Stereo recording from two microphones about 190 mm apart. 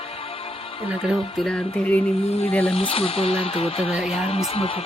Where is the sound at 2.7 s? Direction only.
30° left (ahead or behind).